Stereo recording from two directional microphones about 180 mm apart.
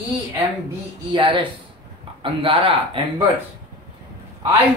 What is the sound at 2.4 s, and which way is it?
Speech, 30° right (ahead or behind).